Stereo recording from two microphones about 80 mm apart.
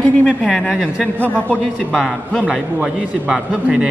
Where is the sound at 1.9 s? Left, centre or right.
Centre.